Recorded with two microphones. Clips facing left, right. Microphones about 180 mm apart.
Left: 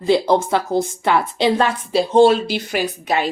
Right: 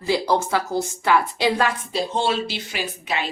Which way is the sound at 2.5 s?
45° left (ahead or behind).